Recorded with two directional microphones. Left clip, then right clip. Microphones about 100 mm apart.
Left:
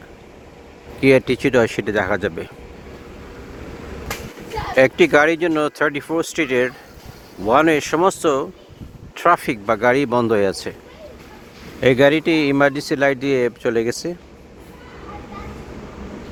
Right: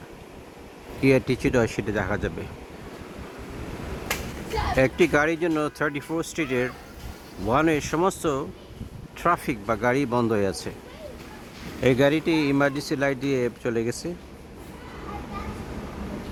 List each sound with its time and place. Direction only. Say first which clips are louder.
1.0 s speech: left 7 dB; 35° left (ahead or behind)
4.7 s speech: left 8 dB; 60° left (ahead or behind)
7.4 s speech: left 7 dB; 80° left
9.1 s speech: left 8 dB; 65° left (ahead or behind)
11.9 s speech: left 8 dB; 50° left (ahead or behind)